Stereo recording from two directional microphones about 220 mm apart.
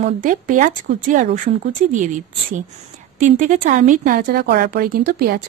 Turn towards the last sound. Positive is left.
turn(degrees=-40)  # may be behind; listen again after turning